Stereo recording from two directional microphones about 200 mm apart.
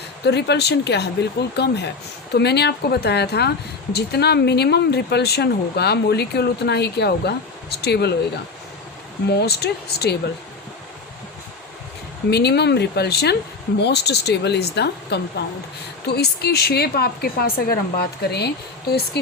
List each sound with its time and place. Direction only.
0.3 s speech: 55° left (ahead or behind)
9.3 s speech: 55° left (ahead or behind)
12.3 s a woman's voice: 55° left (ahead or behind)